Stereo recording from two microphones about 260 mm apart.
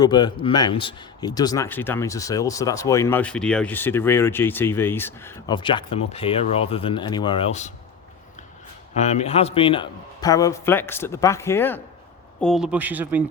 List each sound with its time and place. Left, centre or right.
0.0 s speech: centre
9.0 s speech: left; by 13.2 s centre